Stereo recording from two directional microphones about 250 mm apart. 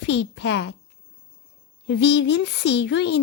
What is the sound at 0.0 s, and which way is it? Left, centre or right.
Speech, left.